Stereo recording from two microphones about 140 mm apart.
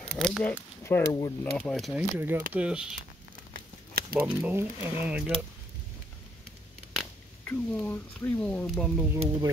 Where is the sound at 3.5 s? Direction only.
90° right.